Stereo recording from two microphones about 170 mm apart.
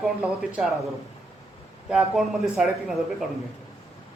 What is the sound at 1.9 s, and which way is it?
A man's voice, centre (ahead or behind).